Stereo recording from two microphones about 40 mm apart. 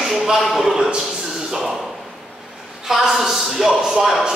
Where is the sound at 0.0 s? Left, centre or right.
Centre.